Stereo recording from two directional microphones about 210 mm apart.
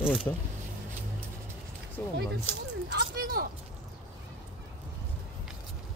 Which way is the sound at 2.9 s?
45° right (ahead or behind).